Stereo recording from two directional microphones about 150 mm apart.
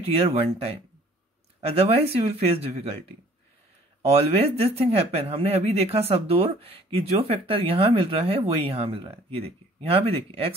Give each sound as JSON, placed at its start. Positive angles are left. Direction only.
{"t": 0.1, "sound": "speech", "side_deg": -40}
{"t": 4.1, "sound": "speech", "side_deg": -45}